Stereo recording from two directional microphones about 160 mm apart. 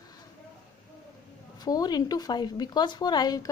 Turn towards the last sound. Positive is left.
turn(degrees=25)  # may be behind; listen again after turning